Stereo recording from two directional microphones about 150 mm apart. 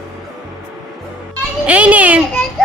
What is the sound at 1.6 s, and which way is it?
Speech, 10° right (ahead or behind).